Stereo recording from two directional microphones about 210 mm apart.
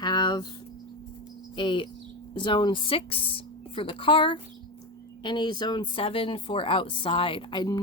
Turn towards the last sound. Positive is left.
turn(degrees=20)  # may be behind; listen again after turning